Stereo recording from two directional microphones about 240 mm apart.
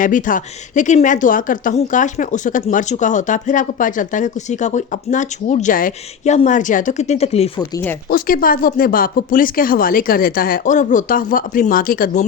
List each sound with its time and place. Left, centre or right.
0.0 s speech: left
8.1 s speech: left